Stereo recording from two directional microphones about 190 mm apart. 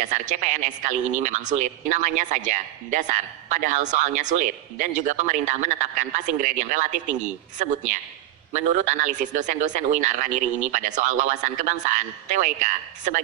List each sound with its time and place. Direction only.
0.0 s speech: 40° right (ahead or behind)